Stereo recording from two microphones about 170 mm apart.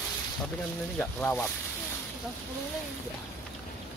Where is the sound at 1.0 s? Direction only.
10° left (ahead or behind).